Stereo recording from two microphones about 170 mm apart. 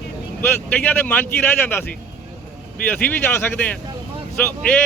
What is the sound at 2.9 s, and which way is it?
Speech, 10° left (ahead or behind).